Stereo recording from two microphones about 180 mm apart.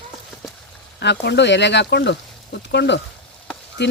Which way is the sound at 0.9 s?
70° left (ahead or behind).